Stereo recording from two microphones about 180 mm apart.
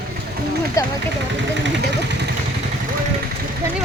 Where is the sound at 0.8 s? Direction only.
15° left (ahead or behind).